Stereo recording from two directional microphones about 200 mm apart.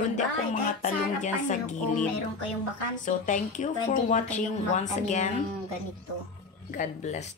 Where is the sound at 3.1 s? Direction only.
40° left (ahead or behind).